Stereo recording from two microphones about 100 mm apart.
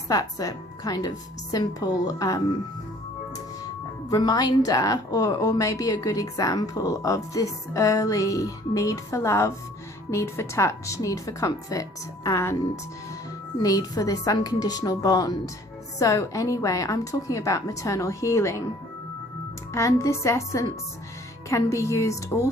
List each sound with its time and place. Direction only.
0.1 s a woman's voice: 40° left (ahead or behind)
4.1 s a woman's voice: 40° left (ahead or behind)
13.6 s a woman's voice: 40° left (ahead or behind)
19.7 s a woman's voice: 30° left (ahead or behind)